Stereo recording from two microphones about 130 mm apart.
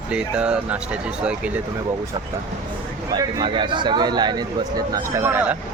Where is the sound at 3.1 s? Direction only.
40° right (ahead or behind).